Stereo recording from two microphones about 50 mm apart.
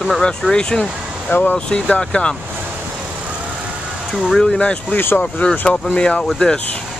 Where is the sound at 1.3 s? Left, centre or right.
Left.